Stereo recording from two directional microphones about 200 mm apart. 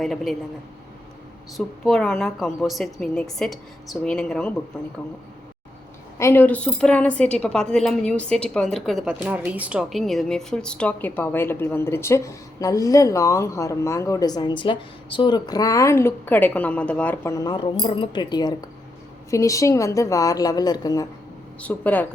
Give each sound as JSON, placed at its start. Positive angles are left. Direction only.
{"t": 0.0, "sound": "a woman's voice", "side_deg": 0}
{"t": 1.5, "sound": "a woman's voice", "side_deg": 0}
{"t": 6.1, "sound": "a woman's voice", "side_deg": 10}